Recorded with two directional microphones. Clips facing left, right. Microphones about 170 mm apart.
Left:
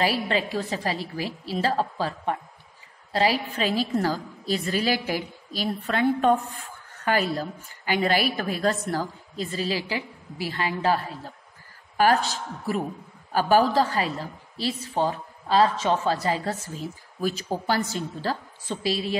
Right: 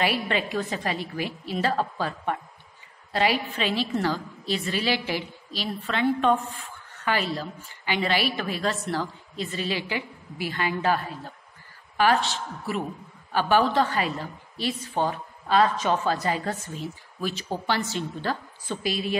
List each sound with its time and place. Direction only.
0.0 s a woman's voice: 35° left (ahead or behind)